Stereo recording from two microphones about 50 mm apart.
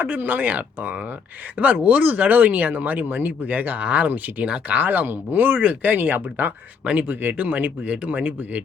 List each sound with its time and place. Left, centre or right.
0.0 s speech: right
5.5 s speech: right